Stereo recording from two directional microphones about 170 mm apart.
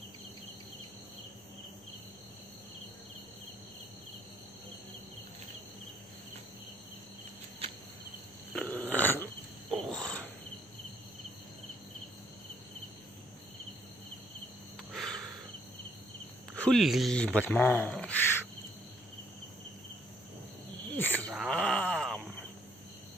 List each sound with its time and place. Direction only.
8.5 s a sound: 10° left (ahead or behind)
9.7 s cricket: centre (ahead or behind)
14.9 s a sound: centre (ahead or behind)
16.6 s speech: centre (ahead or behind)
20.8 s cricket: 10° left (ahead or behind)
21.5 s groan: 5° left (ahead or behind)